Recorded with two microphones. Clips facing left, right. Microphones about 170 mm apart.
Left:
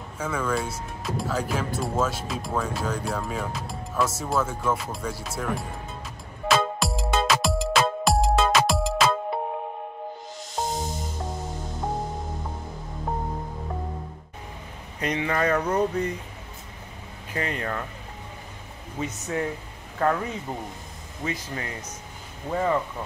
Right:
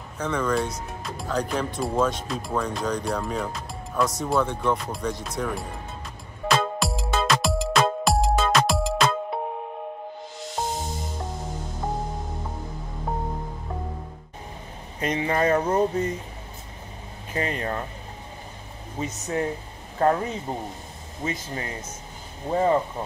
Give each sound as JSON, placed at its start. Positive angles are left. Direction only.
{"t": 0.2, "sound": "speech", "side_deg": 5}
{"t": 6.4, "sound": "music", "side_deg": 0}
{"t": 15.0, "sound": "speech", "side_deg": -25}
{"t": 17.3, "sound": "speech", "side_deg": -25}
{"t": 18.9, "sound": "speech", "side_deg": -35}